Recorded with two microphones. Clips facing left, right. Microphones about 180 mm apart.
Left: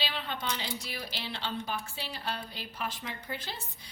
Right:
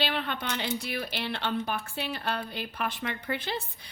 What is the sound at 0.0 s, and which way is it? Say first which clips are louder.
Speech: right 5 dB; 60° right (ahead or behind).